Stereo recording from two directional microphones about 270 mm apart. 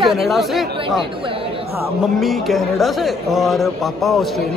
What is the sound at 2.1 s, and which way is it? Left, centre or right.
Speech, centre.